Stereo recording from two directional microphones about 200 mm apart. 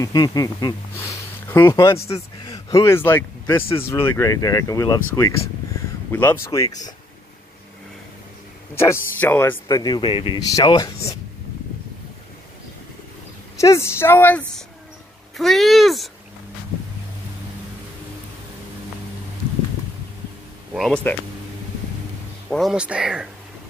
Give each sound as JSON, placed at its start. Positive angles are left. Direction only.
{"t": 0.0, "sound": "speech", "side_deg": 20}
{"t": 2.0, "sound": "speech", "side_deg": 30}
{"t": 6.1, "sound": "speech", "side_deg": 10}
{"t": 8.7, "sound": "speech", "side_deg": 10}
{"t": 13.6, "sound": "speech", "side_deg": 15}
{"t": 20.7, "sound": "speech", "side_deg": 5}
{"t": 22.5, "sound": "speech", "side_deg": 0}